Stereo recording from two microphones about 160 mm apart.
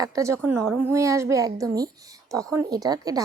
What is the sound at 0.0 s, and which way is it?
A woman's voice, 20° right (ahead or behind).